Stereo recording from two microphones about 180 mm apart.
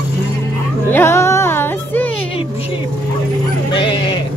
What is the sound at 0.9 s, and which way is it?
Music, 15° left (ahead or behind).